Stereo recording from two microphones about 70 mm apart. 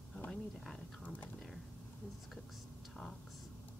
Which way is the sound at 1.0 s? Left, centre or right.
Left.